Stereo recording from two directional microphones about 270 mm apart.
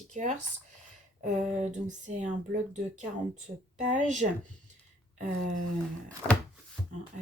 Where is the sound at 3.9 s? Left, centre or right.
Right.